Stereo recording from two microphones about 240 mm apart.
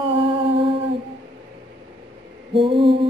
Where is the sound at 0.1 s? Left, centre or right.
Right.